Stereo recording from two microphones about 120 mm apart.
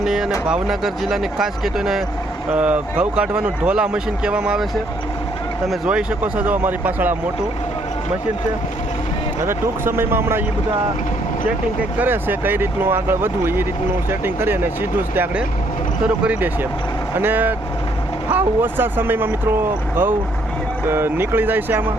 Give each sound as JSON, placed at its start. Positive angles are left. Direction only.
{"t": 0.0, "sound": "speech", "side_deg": -5}
{"t": 9.4, "sound": "speech", "side_deg": -20}
{"t": 11.9, "sound": "speech", "side_deg": -15}